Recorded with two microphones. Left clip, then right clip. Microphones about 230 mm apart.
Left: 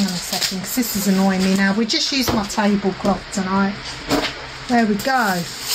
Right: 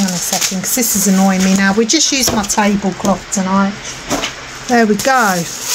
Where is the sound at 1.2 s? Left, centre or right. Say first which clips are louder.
Right 4 dB; right.